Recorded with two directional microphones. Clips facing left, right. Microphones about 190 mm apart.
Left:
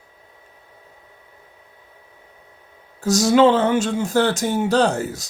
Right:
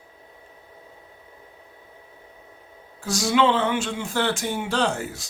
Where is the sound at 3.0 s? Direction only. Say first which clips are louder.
Left 7 dB; 40° left (ahead or behind).